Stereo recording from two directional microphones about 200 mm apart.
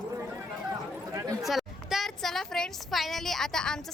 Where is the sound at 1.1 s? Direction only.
15° right (ahead or behind).